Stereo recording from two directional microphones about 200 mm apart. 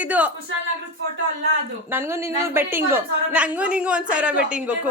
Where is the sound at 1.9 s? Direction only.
10° right (ahead or behind).